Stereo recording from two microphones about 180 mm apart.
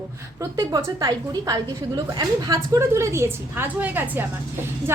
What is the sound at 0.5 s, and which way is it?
A woman's voice, 20° right (ahead or behind).